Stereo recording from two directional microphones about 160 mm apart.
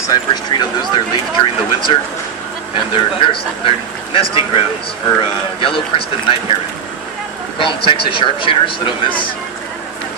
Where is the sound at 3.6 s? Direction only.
35° left (ahead or behind).